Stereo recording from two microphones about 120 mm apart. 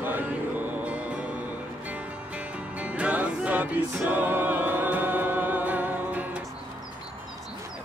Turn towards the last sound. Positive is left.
turn(degrees=-15)  # may be behind; listen again after turning